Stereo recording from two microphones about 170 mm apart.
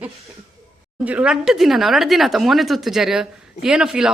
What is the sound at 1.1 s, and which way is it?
Speech, 5° right (ahead or behind).